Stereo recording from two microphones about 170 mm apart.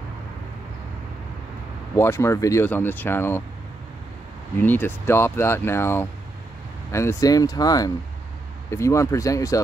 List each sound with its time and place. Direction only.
2.0 s speech: 15° left (ahead or behind)
4.6 s speech: 10° left (ahead or behind)